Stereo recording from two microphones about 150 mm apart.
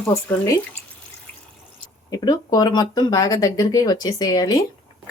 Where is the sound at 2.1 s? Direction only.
25° left (ahead or behind).